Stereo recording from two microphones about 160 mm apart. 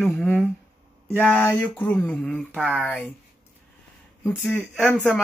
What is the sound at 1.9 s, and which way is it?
Speech, 10° left (ahead or behind).